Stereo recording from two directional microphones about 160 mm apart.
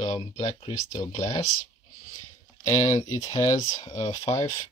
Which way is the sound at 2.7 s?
20° left (ahead or behind).